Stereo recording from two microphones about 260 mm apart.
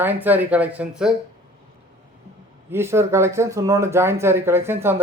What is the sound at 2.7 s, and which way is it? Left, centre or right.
Speech, centre.